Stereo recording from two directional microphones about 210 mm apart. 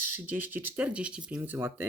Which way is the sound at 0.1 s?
10° right (ahead or behind).